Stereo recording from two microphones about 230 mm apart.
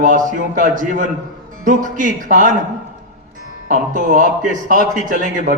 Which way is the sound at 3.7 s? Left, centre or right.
Right.